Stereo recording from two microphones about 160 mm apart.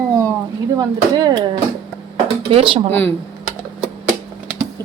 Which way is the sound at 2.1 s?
35° right (ahead or behind).